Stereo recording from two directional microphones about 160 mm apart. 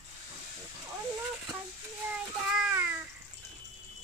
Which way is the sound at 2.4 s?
5° right (ahead or behind).